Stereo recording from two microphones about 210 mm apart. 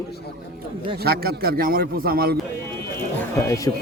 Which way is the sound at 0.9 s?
45° right (ahead or behind).